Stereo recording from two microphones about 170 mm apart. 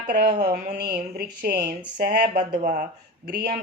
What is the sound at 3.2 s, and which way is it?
Speech, 60° right (ahead or behind).